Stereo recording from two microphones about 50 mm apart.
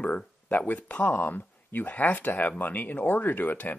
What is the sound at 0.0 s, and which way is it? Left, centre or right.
Speech, left.